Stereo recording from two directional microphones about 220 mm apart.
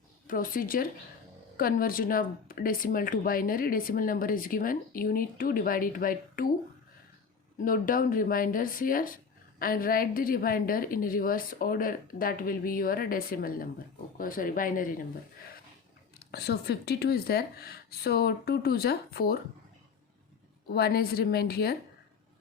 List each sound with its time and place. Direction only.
0.3 s speech: 40° left (ahead or behind)
7.6 s speech: 40° left (ahead or behind)
16.1 s speech: 45° left (ahead or behind)
20.7 s speech: 45° left (ahead or behind)